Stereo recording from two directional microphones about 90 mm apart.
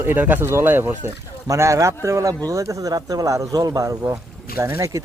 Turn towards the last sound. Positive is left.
turn(degrees=-35)  # may be behind; listen again after turning